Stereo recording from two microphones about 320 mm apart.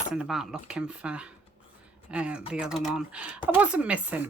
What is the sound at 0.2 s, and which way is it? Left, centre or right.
Speech, centre.